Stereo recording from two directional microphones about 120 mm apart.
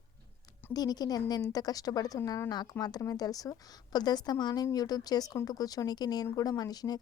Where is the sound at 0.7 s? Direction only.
35° left (ahead or behind).